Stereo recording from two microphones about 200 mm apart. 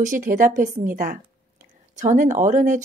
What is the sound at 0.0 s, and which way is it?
Speech, 40° right (ahead or behind).